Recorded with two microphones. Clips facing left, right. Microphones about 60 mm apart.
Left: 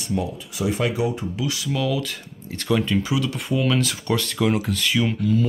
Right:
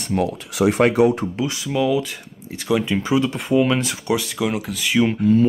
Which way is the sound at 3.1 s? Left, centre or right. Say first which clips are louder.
Right 5 dB; right.